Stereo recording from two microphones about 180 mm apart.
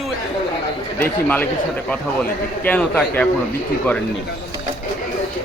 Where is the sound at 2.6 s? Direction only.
10° left (ahead or behind).